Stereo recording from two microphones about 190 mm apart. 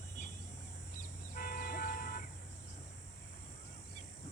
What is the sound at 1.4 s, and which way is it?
Vehicle, 55° left (ahead or behind).